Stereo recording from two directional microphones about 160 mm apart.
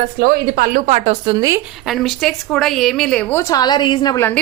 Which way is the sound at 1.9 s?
Centre (ahead or behind).